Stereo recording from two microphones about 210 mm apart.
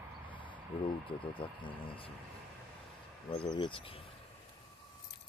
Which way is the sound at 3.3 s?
25° left (ahead or behind).